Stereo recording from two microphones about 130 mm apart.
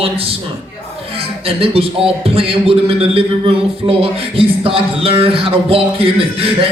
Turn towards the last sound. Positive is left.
turn(degrees=-45)  # may be behind; listen again after turning